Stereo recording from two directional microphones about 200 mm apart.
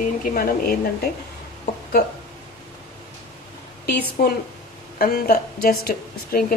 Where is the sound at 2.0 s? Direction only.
55° left (ahead or behind).